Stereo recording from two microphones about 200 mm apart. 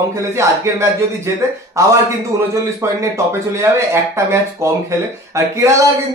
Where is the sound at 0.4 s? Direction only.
15° right (ahead or behind).